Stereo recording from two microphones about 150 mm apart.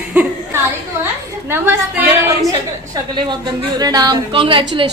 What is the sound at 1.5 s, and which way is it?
Speech, 15° right (ahead or behind).